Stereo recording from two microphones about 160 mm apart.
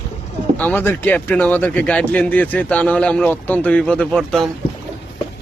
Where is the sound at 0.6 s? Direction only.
10° left (ahead or behind).